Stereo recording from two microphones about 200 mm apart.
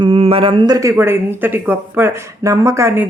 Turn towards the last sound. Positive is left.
turn(degrees=-15)  # may be behind; listen again after turning